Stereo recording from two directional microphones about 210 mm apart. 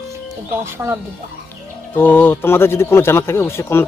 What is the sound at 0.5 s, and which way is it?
Speech, 10° right (ahead or behind).